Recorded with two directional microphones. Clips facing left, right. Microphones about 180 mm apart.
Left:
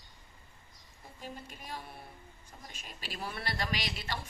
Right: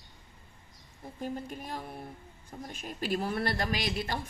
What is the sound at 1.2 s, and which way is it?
A woman's voice, 50° right (ahead or behind).